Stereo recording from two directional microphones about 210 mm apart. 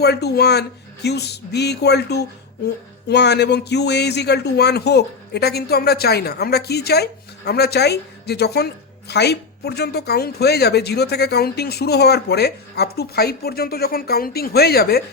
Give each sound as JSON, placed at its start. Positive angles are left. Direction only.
{"t": 0.0, "sound": "speech", "side_deg": 50}